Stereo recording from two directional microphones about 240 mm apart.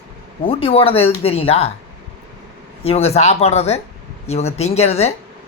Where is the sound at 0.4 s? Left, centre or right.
Left.